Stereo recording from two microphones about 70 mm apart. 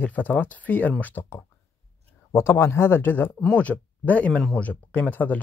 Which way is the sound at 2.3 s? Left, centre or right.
Left.